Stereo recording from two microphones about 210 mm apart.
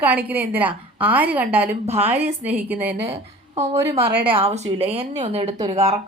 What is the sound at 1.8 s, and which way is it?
Speech, 30° right (ahead or behind).